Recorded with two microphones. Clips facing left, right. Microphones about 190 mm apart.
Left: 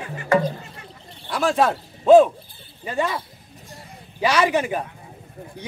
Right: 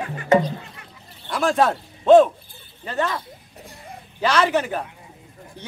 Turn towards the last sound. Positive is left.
turn(degrees=10)  # may be behind; listen again after turning